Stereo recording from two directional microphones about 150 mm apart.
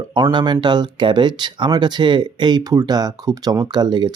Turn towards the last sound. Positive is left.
turn(degrees=-30)  # may be behind; listen again after turning